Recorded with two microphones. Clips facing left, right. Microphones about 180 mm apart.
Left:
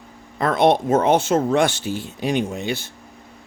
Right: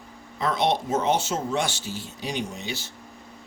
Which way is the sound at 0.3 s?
55° left (ahead or behind).